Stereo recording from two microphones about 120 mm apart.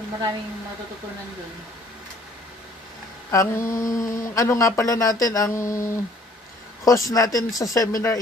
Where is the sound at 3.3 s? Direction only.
25° left (ahead or behind).